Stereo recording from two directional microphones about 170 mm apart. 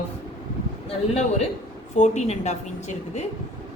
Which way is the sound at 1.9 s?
45° left (ahead or behind).